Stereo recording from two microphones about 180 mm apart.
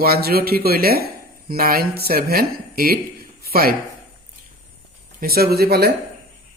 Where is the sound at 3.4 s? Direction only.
60° right (ahead or behind).